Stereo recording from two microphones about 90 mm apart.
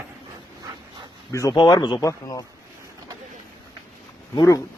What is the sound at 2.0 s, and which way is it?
Speech, 40° left (ahead or behind).